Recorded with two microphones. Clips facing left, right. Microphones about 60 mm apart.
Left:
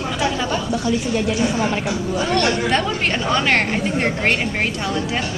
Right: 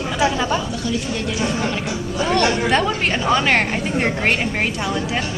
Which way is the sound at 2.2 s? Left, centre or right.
Centre.